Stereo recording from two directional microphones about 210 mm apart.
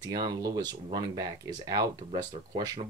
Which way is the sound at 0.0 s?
20° right (ahead or behind).